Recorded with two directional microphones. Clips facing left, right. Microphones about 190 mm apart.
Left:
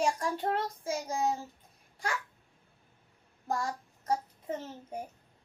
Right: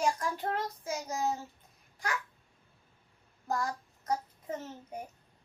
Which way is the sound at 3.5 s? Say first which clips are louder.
Even; 30° left (ahead or behind).